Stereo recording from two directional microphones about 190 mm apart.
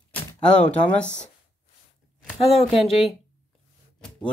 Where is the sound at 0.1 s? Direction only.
5° left (ahead or behind).